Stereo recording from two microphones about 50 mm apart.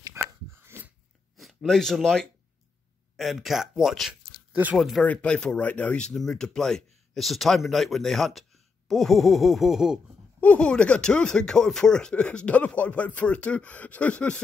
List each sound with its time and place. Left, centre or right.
0.1 s a sound: right
1.3 s a sound: centre
3.2 s speech: centre
4.5 s speech: right
4.7 s speech: centre
5.0 s speech: left
6.0 s speech: centre
10.4 s speech: left